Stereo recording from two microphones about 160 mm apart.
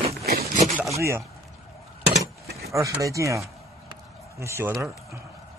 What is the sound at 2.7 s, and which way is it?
Speech, 20° right (ahead or behind).